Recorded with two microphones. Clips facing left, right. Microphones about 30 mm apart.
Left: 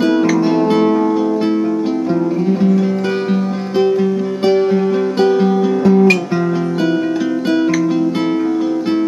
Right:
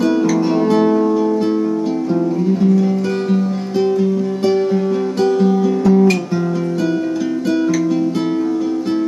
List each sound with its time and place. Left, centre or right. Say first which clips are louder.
5.2 s music: left 1 dB; left